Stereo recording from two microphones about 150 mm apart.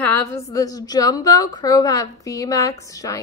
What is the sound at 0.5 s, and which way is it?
A woman's voice, 25° left (ahead or behind).